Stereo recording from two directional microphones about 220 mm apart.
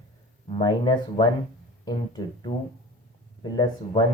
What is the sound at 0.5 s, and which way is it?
Speech, 20° left (ahead or behind).